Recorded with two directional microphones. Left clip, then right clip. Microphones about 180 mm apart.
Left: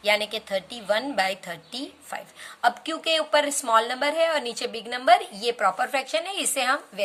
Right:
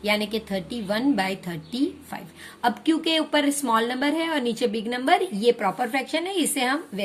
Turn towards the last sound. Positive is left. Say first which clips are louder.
# left 1 dB
turn(degrees=20)  # may be behind; listen again after turning